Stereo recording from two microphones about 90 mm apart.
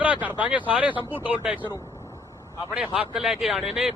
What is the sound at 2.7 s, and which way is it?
Speech, 10° right (ahead or behind).